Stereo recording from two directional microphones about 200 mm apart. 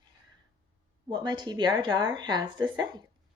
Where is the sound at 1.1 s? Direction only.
20° right (ahead or behind).